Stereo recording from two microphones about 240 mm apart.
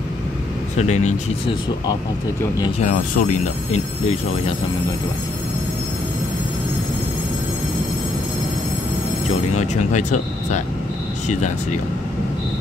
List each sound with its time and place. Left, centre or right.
0.7 s speech: left
2.8 s speech: left
9.5 s speech: left